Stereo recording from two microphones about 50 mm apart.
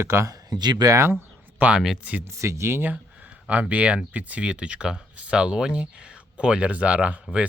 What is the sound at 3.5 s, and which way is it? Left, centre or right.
Speech, right.